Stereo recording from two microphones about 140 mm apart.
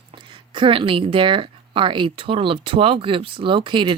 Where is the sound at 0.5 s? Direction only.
40° right (ahead or behind).